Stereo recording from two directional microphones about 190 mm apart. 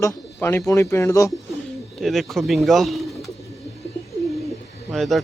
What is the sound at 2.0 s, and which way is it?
Speech, centre (ahead or behind).